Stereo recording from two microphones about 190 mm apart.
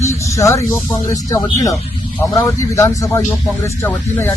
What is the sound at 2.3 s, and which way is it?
Speech, 15° left (ahead or behind).